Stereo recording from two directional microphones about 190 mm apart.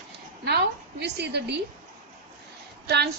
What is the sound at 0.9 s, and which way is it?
Speech, 65° right (ahead or behind).